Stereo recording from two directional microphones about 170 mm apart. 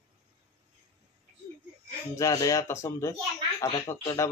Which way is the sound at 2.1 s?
20° left (ahead or behind).